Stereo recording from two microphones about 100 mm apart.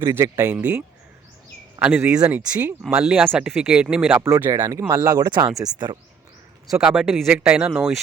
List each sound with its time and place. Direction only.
0.0 s speech: 30° right (ahead or behind)
0.5 s speech: 15° right (ahead or behind)
2.1 s speech: 15° right (ahead or behind)
2.8 s speech: 5° right (ahead or behind)
4.1 s speech: 20° right (ahead or behind)
6.7 s speech: 5° right (ahead or behind)